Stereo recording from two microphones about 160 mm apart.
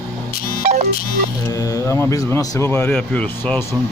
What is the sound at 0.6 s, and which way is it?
Music, 45° right (ahead or behind).